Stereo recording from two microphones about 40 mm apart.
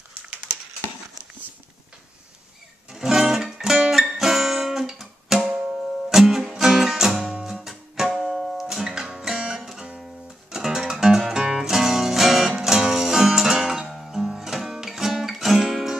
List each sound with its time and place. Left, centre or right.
2.9 s music: centre
5.5 s music: centre
6.0 s music: centre